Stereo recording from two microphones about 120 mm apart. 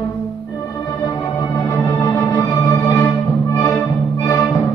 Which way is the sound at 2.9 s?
20° left (ahead or behind).